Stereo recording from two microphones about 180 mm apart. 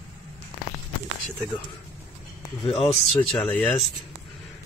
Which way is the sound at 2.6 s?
30° left (ahead or behind).